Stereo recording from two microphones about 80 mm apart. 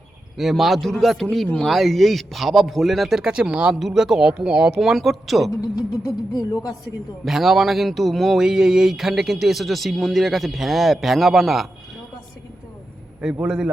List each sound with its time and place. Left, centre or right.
0.3 s speech: centre
6.3 s speech: left
7.3 s speech: centre
13.4 s a man's voice: centre